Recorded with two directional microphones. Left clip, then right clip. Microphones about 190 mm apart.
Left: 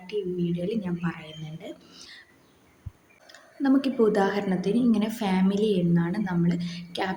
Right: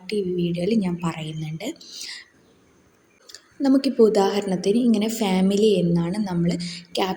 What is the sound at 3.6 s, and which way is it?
A woman's voice, 20° right (ahead or behind).